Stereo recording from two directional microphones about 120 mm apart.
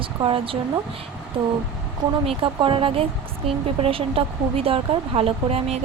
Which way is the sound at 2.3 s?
45° right (ahead or behind).